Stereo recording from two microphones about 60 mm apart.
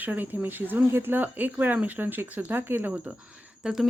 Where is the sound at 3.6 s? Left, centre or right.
Centre.